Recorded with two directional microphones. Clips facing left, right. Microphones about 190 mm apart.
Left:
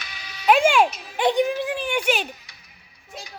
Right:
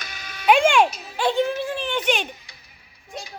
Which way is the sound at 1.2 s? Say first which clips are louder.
Left 1 dB; 15° left (ahead or behind).